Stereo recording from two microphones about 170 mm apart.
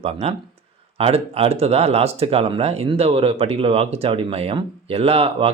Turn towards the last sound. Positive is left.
turn(degrees=-35)  # may be behind; listen again after turning